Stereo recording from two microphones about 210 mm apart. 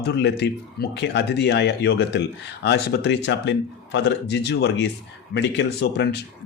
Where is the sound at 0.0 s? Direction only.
55° left (ahead or behind).